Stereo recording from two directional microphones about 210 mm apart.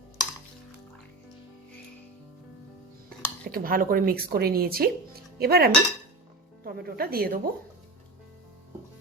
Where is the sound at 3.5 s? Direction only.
45° right (ahead or behind).